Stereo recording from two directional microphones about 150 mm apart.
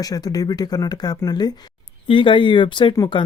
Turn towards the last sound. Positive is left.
turn(degrees=30)  # may be behind; listen again after turning